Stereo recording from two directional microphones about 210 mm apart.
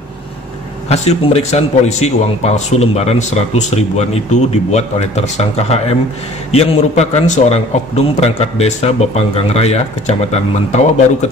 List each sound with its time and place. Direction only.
0.8 s a man's voice: 30° left (ahead or behind)